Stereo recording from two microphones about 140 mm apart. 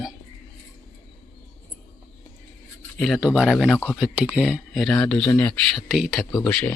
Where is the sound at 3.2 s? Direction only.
5° right (ahead or behind); by 5.5 s 15° left (ahead or behind).